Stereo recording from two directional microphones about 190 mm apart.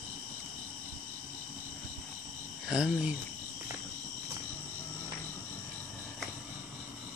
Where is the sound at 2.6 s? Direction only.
5° right (ahead or behind).